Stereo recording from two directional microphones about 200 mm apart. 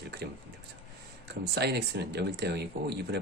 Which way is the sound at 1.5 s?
55° right (ahead or behind).